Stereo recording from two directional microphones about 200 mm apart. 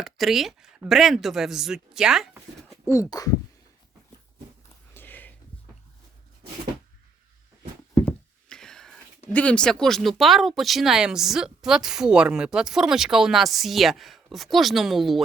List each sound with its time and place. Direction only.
0.0 s speech: centre (ahead or behind)
2.8 s speech: 15° left (ahead or behind)
4.9 s sniff: 10° left (ahead or behind)
8.0 s knock: 5° left (ahead or behind)
9.3 s speech: 5° left (ahead or behind)